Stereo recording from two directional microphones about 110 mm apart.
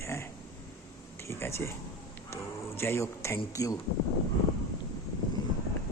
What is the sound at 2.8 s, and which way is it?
Speech, 25° left (ahead or behind).